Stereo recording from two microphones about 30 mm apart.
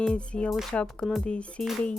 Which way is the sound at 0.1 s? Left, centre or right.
Left.